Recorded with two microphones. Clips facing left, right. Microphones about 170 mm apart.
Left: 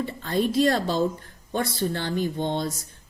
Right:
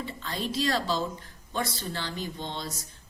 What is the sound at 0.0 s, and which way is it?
Speech, 50° left (ahead or behind).